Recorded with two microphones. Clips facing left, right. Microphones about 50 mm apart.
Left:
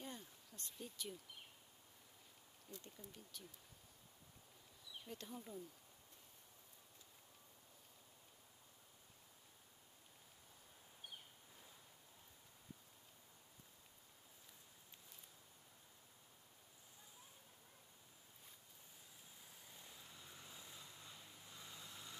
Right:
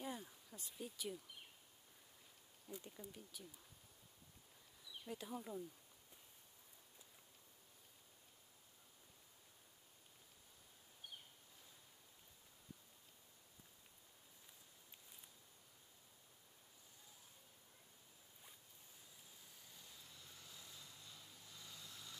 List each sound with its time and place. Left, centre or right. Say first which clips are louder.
0.0 s a sound: right 4 dB; centre
2.7 s speech: right 4 dB; centre
5.0 s speech: right 4 dB; centre
19.7 s vehicle: left 2 dB; left